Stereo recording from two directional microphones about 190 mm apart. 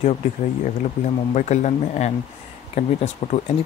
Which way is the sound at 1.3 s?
40° left (ahead or behind).